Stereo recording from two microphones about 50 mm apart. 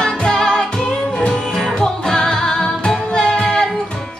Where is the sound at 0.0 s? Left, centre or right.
Centre.